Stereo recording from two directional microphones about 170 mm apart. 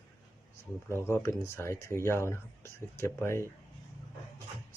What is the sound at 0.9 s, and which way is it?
Speech, 15° left (ahead or behind).